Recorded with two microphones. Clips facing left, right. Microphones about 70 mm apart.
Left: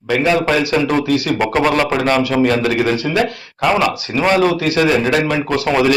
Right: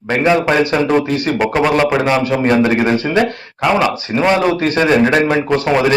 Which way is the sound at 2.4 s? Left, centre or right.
Right.